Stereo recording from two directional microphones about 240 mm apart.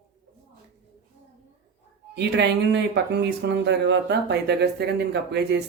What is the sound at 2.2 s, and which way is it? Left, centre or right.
Speech, right.